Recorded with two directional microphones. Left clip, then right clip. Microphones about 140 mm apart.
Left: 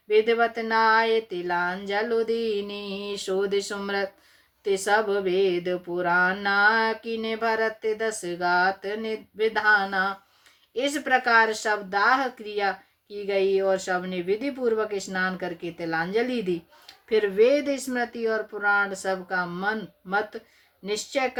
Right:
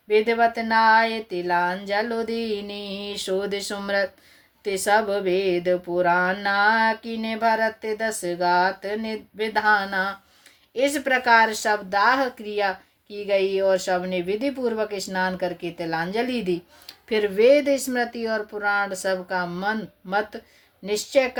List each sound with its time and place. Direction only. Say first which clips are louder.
0.1 s speech: right 2 dB; 35° right (ahead or behind)